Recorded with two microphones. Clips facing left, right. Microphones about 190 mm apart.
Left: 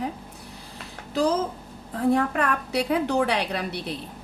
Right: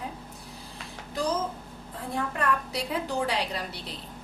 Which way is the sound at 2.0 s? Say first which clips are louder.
Left 9 dB; 70° left (ahead or behind).